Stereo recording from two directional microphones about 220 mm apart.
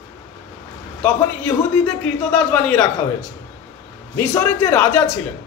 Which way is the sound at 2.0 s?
5° left (ahead or behind).